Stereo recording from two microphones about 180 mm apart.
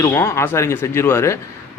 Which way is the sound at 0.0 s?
15° left (ahead or behind).